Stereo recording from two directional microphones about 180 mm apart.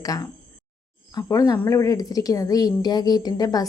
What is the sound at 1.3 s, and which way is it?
A woman's voice, 20° left (ahead or behind).